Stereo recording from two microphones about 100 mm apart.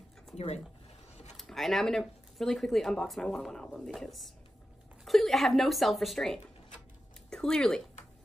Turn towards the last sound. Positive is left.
turn(degrees=5)  # may be behind; listen again after turning